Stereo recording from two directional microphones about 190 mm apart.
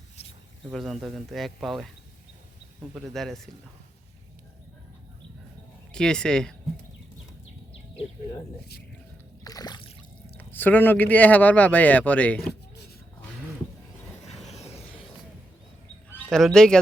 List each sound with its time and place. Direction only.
0.7 s speech: centre (ahead or behind)
2.9 s speech: centre (ahead or behind)
5.9 s speech: 5° left (ahead or behind)
9.4 s a sound: 20° left (ahead or behind)
10.3 s speech: 10° left (ahead or behind)
14.3 s a sound: 35° left (ahead or behind)
16.0 s speech: 5° left (ahead or behind)